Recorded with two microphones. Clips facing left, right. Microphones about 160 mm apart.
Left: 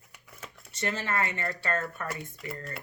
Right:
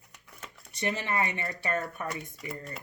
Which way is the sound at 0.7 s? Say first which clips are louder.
Right 1 dB; 15° right (ahead or behind).